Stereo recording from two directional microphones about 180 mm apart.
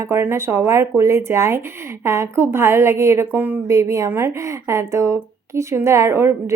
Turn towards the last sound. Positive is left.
turn(degrees=-15)  # may be behind; listen again after turning